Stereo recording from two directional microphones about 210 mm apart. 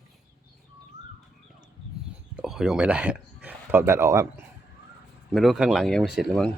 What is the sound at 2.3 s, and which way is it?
Speech, centre (ahead or behind).